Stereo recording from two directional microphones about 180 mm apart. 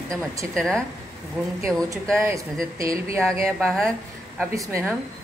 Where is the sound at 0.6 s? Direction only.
5° left (ahead or behind).